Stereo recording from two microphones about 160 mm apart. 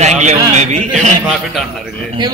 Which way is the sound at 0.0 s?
45° right (ahead or behind).